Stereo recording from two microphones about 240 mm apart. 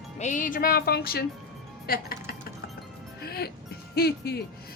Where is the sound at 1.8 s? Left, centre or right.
Left.